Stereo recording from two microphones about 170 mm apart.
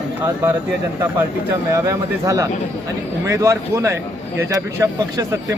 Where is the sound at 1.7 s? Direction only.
20° right (ahead or behind).